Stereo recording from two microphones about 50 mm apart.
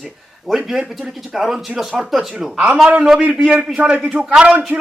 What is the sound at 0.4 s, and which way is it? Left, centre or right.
Speech, centre.